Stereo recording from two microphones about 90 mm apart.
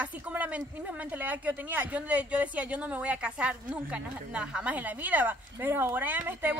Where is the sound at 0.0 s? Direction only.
15° right (ahead or behind).